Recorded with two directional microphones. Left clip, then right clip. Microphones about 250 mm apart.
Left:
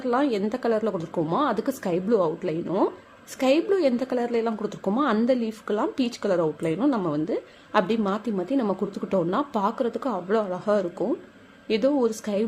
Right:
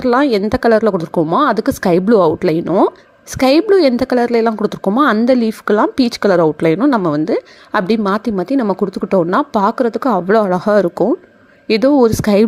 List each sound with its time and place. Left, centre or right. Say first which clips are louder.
0.0 s a woman's voice: right 11 dB; right